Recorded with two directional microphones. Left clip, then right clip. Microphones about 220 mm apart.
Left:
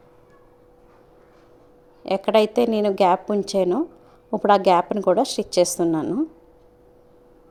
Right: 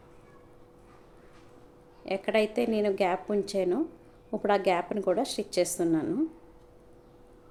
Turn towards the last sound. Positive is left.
turn(degrees=25)  # may be behind; listen again after turning